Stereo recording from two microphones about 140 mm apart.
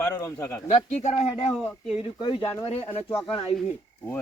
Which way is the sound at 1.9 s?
40° left (ahead or behind).